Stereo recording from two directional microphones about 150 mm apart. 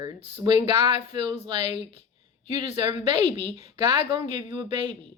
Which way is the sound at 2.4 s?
35° right (ahead or behind).